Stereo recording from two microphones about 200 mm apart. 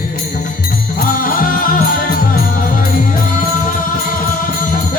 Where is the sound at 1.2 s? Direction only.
45° left (ahead or behind).